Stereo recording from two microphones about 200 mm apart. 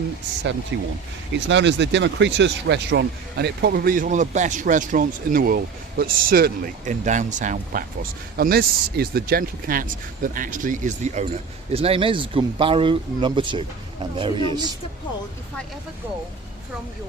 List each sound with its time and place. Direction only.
0.7 s speech: 65° right (ahead or behind); by 14.4 s 25° right (ahead or behind)